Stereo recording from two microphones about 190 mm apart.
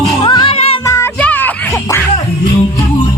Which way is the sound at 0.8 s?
15° left (ahead or behind).